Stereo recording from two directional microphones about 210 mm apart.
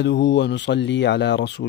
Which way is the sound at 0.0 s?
55° left (ahead or behind).